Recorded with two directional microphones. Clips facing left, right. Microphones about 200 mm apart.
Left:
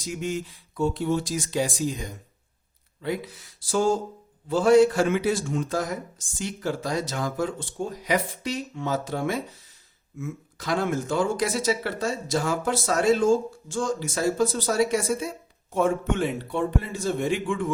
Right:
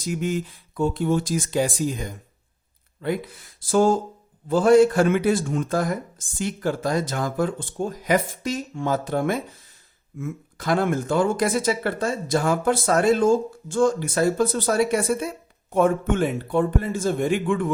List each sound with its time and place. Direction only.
0.0 s a man's voice: 55° right (ahead or behind)